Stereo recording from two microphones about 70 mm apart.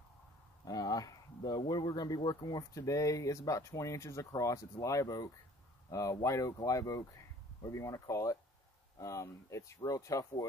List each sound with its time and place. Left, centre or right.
0.7 s speech: left
2.7 s speech: left